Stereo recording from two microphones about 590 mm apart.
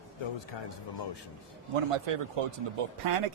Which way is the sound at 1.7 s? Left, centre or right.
Right.